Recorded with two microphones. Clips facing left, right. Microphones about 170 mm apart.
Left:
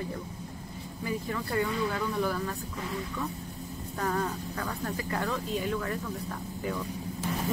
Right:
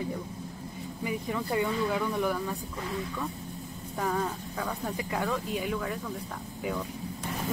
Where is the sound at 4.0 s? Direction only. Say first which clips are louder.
Right 1 dB; centre (ahead or behind).